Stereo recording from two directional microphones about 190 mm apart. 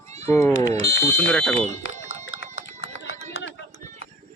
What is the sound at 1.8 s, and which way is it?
Run, 90° left.